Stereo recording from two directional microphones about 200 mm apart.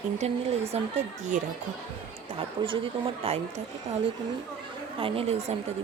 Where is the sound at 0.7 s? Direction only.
30° right (ahead or behind).